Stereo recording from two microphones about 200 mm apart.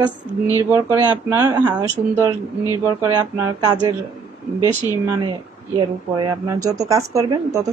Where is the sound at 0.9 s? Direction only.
15° right (ahead or behind).